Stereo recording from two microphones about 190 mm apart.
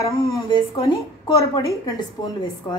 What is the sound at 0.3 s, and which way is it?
A woman's voice, 20° left (ahead or behind).